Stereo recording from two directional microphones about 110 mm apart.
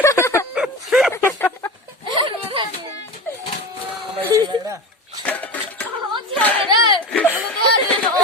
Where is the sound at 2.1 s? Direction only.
50° right (ahead or behind).